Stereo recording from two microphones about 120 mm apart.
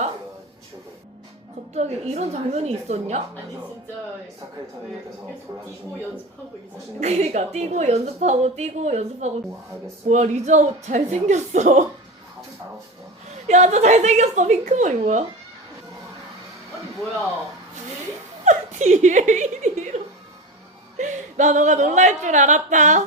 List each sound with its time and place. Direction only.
1.7 s a woman's voice: 65° right (ahead or behind)
7.0 s a woman's voice: 65° right (ahead or behind)
13.5 s a woman's voice: 70° right (ahead or behind)
18.4 s chuckle: 90° right
21.0 s speech: 90° right